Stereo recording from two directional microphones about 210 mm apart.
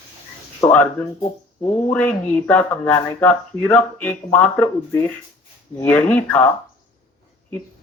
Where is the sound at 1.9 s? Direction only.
5° left (ahead or behind).